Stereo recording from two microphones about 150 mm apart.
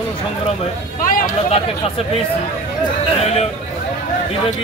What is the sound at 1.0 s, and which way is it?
Speech, 65° left (ahead or behind).